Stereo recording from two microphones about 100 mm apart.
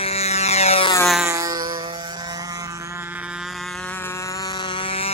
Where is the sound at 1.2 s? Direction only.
35° right (ahead or behind).